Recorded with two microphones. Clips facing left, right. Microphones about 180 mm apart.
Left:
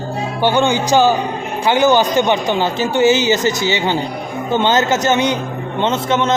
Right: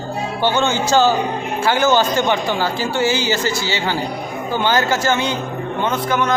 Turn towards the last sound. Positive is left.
turn(degrees=25)  # may be behind; listen again after turning